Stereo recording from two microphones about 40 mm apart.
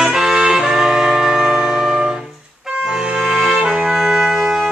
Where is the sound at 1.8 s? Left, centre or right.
Centre.